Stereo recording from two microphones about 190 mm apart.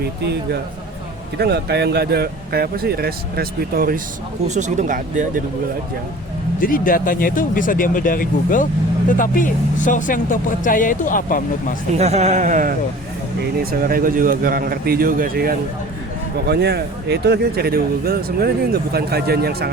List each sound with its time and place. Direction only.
0.0 s speech: 60° right (ahead or behind)
4.4 s speech: 40° right (ahead or behind)
6.6 s speech: 45° left (ahead or behind)
11.9 s a man's voice: 35° right (ahead or behind); by 19.7 s 55° right (ahead or behind)